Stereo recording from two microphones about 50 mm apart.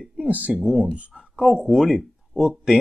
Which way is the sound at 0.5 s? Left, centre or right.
Centre.